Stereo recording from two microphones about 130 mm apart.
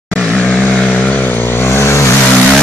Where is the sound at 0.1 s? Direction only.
10° left (ahead or behind).